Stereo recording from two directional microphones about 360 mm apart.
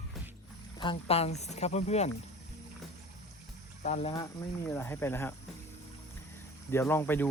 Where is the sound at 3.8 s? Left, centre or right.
Centre.